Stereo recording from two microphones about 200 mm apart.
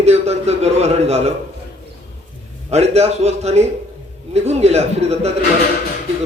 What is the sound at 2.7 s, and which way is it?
A man's voice, 30° right (ahead or behind).